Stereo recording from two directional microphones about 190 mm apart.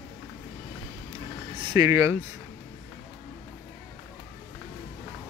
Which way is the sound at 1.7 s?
15° right (ahead or behind).